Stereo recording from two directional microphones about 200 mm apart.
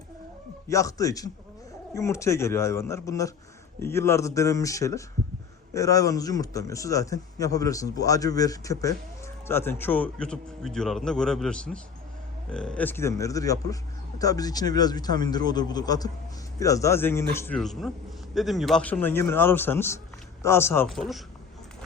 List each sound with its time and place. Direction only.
0.7 s a man's voice: 15° left (ahead or behind)
20.9 s speech: centre (ahead or behind)